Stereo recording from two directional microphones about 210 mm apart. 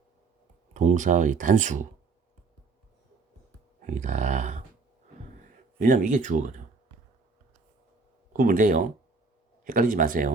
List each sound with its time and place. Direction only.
0.7 s speech: 35° right (ahead or behind)
3.8 s a sound: 35° right (ahead or behind)
5.4 s speech: 40° right (ahead or behind)
8.3 s speech: 40° right (ahead or behind)